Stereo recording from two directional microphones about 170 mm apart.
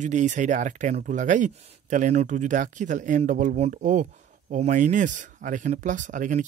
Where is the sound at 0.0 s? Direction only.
45° right (ahead or behind).